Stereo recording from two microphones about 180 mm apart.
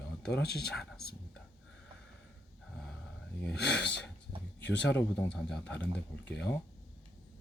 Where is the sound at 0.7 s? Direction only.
5° left (ahead or behind).